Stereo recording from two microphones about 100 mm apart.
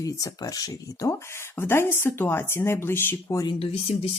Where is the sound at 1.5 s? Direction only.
25° left (ahead or behind).